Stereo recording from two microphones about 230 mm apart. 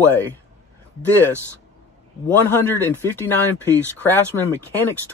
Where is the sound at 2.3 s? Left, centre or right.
Centre.